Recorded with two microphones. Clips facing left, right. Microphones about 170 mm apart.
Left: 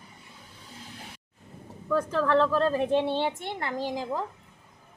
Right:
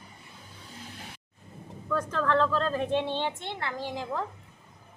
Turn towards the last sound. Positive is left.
turn(degrees=10)  # may be behind; listen again after turning